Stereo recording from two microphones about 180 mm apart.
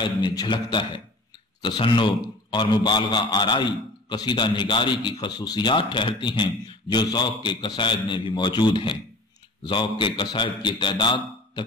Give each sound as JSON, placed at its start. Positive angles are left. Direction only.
{"t": 0.0, "sound": "a man's voice", "side_deg": 25}